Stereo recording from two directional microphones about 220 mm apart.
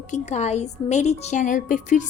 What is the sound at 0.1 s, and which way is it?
A woman's voice, 30° left (ahead or behind).